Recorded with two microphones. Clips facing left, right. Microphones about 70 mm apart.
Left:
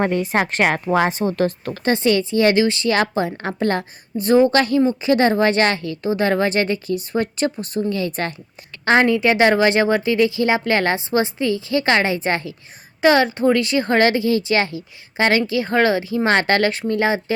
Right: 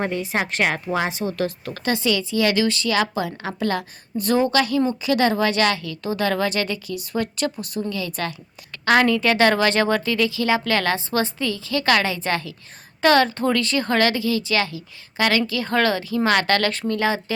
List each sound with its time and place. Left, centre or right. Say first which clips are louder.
0.0 s a woman's voice: left 5 dB; left
4.2 s speech: left 6 dB; left
4.5 s speech: left 3 dB; left